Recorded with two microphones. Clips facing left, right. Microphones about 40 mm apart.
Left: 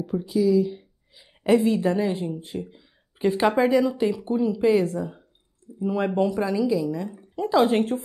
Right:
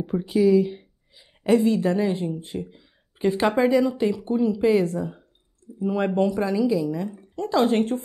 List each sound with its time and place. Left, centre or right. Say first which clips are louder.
0.0 s speech: right 2 dB; right
1.1 s speech: even; centre